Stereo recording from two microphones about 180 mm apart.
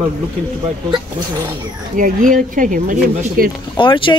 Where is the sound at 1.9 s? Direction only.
45° right (ahead or behind).